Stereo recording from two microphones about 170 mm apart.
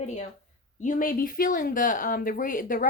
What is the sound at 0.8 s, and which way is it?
A woman's voice, 50° left (ahead or behind).